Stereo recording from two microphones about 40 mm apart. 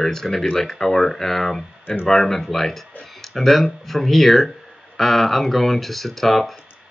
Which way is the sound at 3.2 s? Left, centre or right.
Centre.